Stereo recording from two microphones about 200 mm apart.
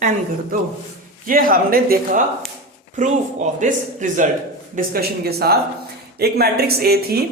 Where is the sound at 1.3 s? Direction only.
45° right (ahead or behind).